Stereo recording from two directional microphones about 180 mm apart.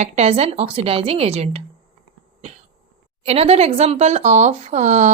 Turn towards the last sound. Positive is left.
turn(degrees=-40)  # may be behind; listen again after turning